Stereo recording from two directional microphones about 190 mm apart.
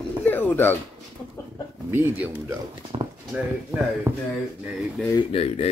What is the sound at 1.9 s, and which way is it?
Speech, 10° right (ahead or behind).